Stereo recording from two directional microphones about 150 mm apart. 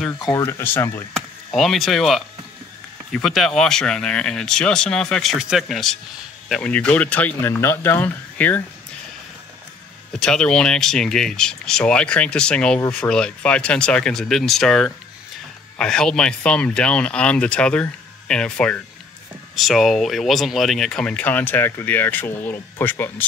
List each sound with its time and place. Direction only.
0.2 s speech: 25° left (ahead or behind)
1.1 s speech: centre (ahead or behind)
10.1 s speech: 5° left (ahead or behind)